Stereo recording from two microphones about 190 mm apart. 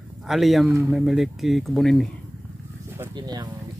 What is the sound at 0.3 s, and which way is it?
Speech, centre (ahead or behind).